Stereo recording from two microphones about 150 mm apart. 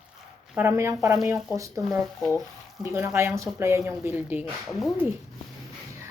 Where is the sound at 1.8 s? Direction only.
Centre (ahead or behind).